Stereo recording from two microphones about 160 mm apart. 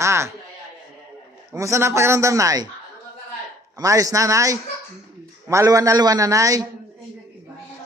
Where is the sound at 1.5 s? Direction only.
20° right (ahead or behind).